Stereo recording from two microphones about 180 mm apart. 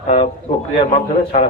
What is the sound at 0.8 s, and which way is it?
Speech, 30° left (ahead or behind).